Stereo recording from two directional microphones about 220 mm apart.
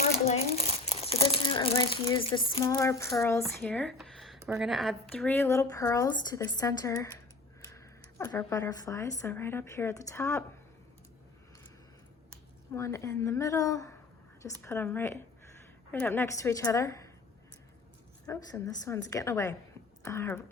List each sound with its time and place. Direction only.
0.3 s speech: 30° left (ahead or behind); by 10.4 s 15° left (ahead or behind)
12.7 s speech: 15° left (ahead or behind)
18.5 s speech: 15° left (ahead or behind)